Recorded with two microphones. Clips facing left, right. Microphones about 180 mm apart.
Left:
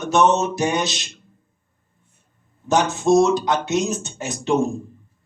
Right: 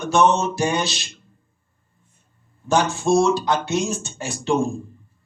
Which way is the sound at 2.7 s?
20° left (ahead or behind).